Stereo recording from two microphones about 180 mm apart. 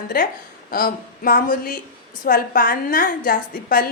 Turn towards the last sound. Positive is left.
turn(degrees=55)  # may be behind; listen again after turning